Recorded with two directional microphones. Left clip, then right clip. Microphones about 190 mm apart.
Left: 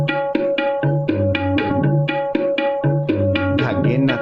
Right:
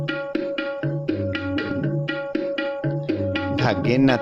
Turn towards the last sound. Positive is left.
turn(degrees=-35)  # may be behind; listen again after turning